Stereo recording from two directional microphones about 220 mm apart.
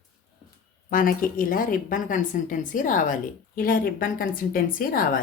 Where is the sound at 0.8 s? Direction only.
40° left (ahead or behind).